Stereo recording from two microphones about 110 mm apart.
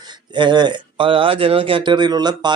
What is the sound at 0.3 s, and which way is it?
Speech, 45° right (ahead or behind).